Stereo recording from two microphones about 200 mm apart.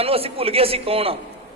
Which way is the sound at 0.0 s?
30° right (ahead or behind).